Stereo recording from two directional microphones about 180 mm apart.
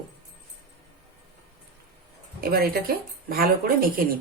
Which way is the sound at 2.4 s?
55° right (ahead or behind).